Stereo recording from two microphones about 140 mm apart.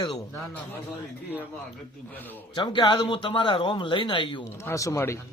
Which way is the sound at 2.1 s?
15° left (ahead or behind).